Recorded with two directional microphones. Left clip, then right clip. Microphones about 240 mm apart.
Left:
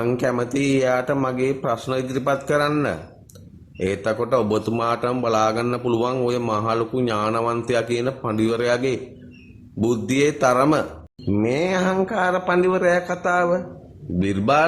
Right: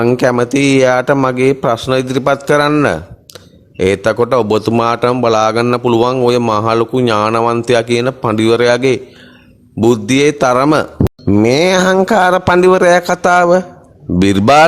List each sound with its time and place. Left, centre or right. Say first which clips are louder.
0.0 s a man's voice: right 10 dB; right